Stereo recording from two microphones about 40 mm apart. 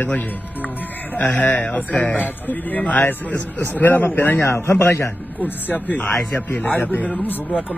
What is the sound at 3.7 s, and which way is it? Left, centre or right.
A man's voice, left.